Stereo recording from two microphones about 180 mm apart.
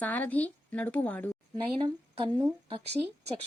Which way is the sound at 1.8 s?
25° right (ahead or behind).